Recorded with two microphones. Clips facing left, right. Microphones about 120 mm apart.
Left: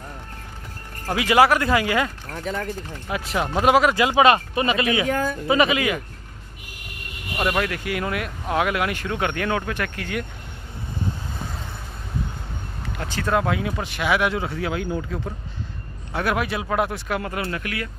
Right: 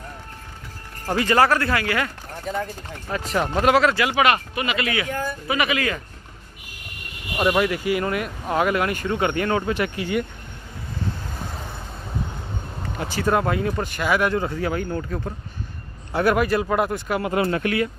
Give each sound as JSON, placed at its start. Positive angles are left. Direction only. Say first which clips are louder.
{"t": 1.1, "sound": "speech", "louder": "left 1 dB", "side_deg": 10}
{"t": 3.1, "sound": "speech", "louder": "right 1 dB", "side_deg": 10}
{"t": 7.3, "sound": "speech", "louder": "right 3 dB", "side_deg": -5}
{"t": 13.0, "sound": "speech", "louder": "right 1 dB", "side_deg": -5}
{"t": 17.3, "sound": "speech", "louder": "right 7 dB", "side_deg": -30}